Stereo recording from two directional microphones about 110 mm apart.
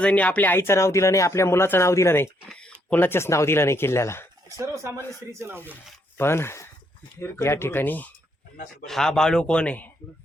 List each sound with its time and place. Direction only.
0.0 s speech: 10° left (ahead or behind)
2.5 s a sound: 10° left (ahead or behind)
2.9 s speech: 20° left (ahead or behind)
4.4 s speech: 30° right (ahead or behind)
6.1 s speech: 20° left (ahead or behind)
8.9 s a man's voice: 5° left (ahead or behind)